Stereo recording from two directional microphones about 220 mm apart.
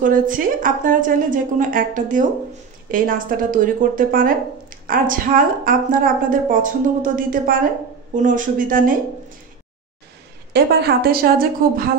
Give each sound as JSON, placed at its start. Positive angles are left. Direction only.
{"t": 0.0, "sound": "speech", "side_deg": -40}
{"t": 10.5, "sound": "a woman's voice", "side_deg": -45}